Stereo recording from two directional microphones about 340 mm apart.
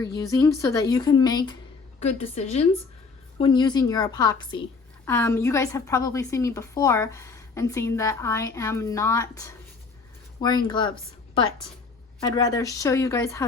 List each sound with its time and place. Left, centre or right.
0.0 s a woman's voice: centre
12.2 s a woman's voice: centre